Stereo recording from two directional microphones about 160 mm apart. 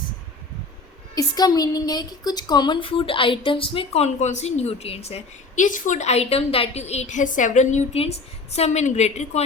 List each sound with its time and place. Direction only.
1.1 s a woman's voice: 25° left (ahead or behind); by 9.4 s 45° left (ahead or behind)